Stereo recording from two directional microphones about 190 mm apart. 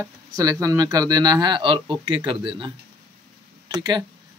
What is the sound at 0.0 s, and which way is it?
Speech, 20° right (ahead or behind).